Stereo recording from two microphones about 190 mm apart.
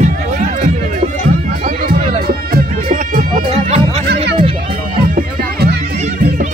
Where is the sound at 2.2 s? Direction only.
45° right (ahead or behind).